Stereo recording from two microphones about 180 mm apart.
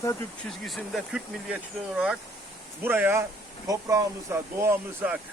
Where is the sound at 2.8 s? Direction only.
10° right (ahead or behind).